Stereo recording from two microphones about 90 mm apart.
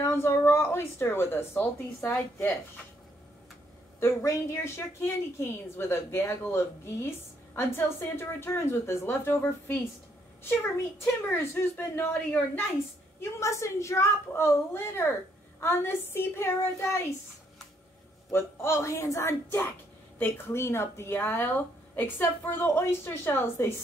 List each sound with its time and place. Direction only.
0.0 s a woman's voice: 30° left (ahead or behind)
4.0 s a woman's voice: 30° left (ahead or behind)
11.3 s a woman's voice: 25° left (ahead or behind)
13.2 s a woman's voice: 35° left (ahead or behind)
18.3 s a woman's voice: 30° left (ahead or behind)